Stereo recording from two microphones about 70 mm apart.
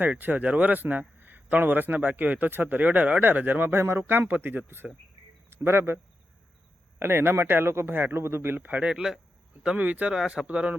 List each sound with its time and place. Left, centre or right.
0.1 s a man's voice: right
7.0 s a man's voice: right
8.8 s speech: centre
9.7 s a man's voice: right